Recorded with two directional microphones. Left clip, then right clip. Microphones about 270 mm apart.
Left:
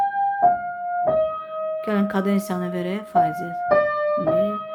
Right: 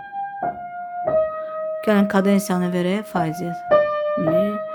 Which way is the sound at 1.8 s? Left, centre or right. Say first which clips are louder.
Right 8 dB; right.